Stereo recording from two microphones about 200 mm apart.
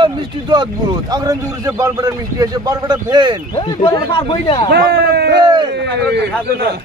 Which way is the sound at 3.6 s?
25° left (ahead or behind).